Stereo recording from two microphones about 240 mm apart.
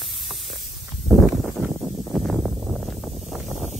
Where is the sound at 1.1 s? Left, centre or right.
Centre.